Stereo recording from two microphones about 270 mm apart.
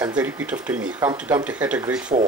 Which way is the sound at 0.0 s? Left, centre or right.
Centre.